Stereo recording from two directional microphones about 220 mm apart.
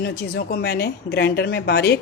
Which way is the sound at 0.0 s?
45° left (ahead or behind).